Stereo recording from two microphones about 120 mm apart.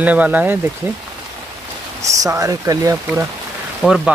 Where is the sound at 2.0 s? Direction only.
30° right (ahead or behind).